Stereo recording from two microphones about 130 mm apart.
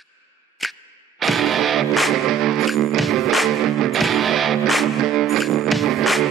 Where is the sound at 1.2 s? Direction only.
Centre (ahead or behind).